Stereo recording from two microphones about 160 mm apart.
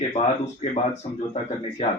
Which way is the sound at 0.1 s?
45° left (ahead or behind).